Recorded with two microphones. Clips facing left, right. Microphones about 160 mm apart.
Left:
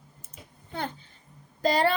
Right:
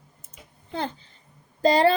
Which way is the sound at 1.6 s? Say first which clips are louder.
Right 5 dB; 30° right (ahead or behind).